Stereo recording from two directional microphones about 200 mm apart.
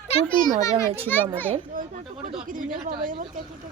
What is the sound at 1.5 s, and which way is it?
A woman's voice, 40° right (ahead or behind).